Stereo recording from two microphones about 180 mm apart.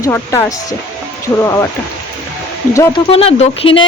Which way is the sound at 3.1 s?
35° left (ahead or behind).